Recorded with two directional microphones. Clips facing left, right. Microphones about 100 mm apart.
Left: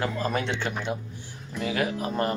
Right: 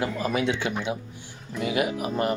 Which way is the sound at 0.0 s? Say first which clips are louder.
Right 2 dB; 10° right (ahead or behind).